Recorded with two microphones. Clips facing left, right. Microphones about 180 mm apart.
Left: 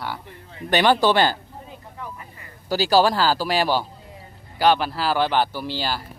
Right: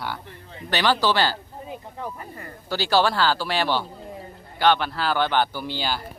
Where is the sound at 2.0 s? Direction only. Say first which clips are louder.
Right 2 dB; 45° right (ahead or behind).